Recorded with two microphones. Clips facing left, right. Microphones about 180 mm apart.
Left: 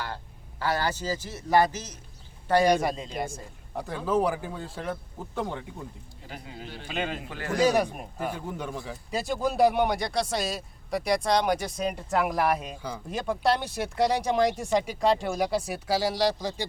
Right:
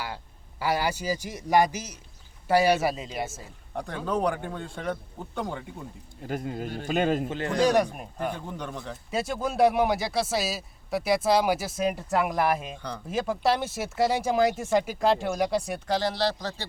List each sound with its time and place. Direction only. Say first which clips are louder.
0.6 s a man's voice: right 1 dB; 10° right (ahead or behind)
6.2 s a man's voice: right 10 dB; 50° right (ahead or behind)
7.3 s a man's voice: right 5 dB; 20° right (ahead or behind)
7.6 s speech: even; 5° left (ahead or behind)